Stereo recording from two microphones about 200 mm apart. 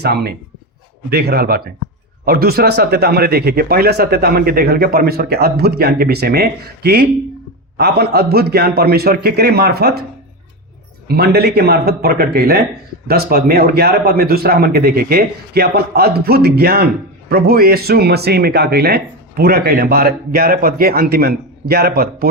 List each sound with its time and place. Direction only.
0.0 s speech: 55° right (ahead or behind)
11.1 s speech: 50° right (ahead or behind)